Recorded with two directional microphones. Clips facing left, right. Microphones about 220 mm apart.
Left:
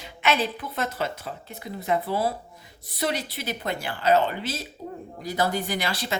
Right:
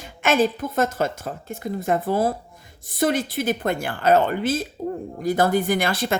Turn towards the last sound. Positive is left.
turn(degrees=-50)  # may be behind; listen again after turning